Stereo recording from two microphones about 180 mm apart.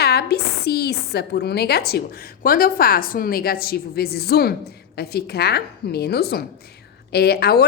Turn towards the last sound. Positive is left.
turn(degrees=60)  # may be behind; listen again after turning